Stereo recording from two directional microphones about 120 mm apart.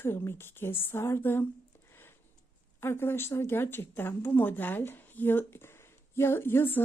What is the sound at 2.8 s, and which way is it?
A woman's voice, 20° left (ahead or behind).